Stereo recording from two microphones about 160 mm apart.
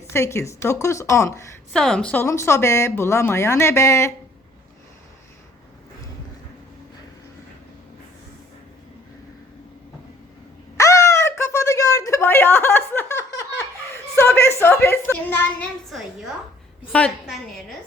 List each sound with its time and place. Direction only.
0.1 s a woman's voice: 15° left (ahead or behind)
1.7 s speech: 5° left (ahead or behind)
2.2 s a woman's voice: 15° left (ahead or behind)
10.8 s a sound: 20° left (ahead or behind)
16.9 s a woman's voice: 10° left (ahead or behind)